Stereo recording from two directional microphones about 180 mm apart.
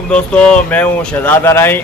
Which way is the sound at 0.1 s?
5° left (ahead or behind).